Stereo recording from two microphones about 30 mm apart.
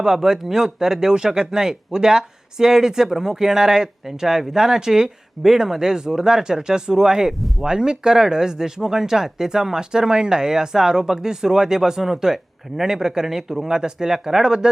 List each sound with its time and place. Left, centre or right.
0.0 s speech: centre
7.3 s speech: centre
7.6 s speech: right